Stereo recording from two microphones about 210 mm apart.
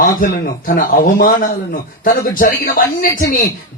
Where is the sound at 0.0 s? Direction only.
40° left (ahead or behind).